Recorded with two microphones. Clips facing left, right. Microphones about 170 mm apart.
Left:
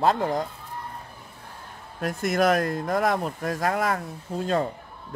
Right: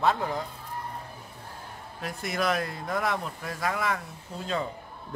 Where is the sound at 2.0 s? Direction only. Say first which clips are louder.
Left 7 dB; 45° left (ahead or behind).